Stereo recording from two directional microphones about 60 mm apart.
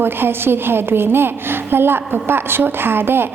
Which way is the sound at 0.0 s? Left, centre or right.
Right.